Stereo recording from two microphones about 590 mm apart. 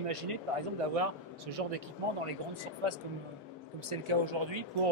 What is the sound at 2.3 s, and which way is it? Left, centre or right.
A man's voice, right.